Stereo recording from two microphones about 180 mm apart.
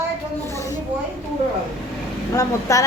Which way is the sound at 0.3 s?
15° left (ahead or behind).